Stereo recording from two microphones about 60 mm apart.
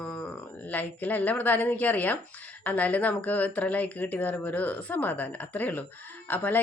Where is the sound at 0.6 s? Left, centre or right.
Left.